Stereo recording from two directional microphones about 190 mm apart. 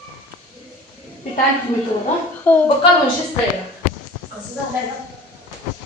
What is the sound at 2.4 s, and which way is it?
Speech, 10° left (ahead or behind).